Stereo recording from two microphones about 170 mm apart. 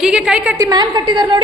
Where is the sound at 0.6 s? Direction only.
25° right (ahead or behind).